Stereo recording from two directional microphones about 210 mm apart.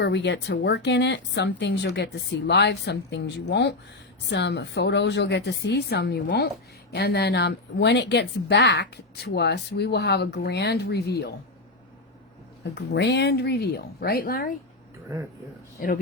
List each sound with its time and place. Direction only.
0.0 s a woman's voice: 55° left (ahead or behind)
12.7 s a woman's voice: 55° left (ahead or behind)